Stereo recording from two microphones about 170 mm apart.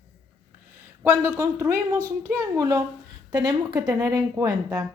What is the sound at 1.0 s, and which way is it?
A woman's voice, 10° right (ahead or behind).